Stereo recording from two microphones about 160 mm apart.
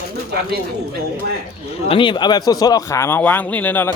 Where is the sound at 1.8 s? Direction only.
35° left (ahead or behind); by 4.0 s 10° left (ahead or behind).